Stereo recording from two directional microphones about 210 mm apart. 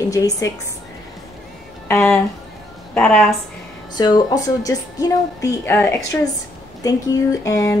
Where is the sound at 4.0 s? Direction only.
20° left (ahead or behind).